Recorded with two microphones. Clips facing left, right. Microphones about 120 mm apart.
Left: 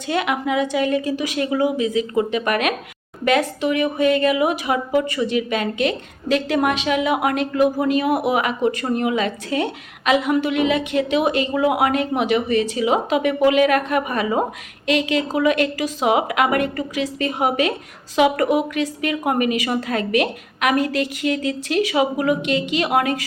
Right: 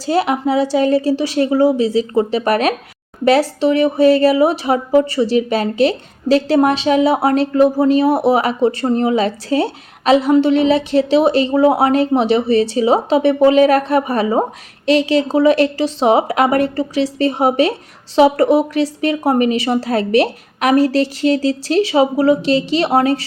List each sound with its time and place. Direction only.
0.0 s a woman's voice: 35° right (ahead or behind)